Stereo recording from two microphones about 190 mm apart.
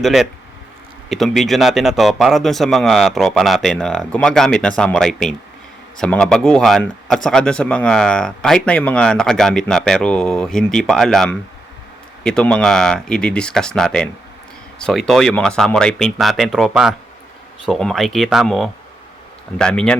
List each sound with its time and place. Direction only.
0.0 s speech: centre (ahead or behind)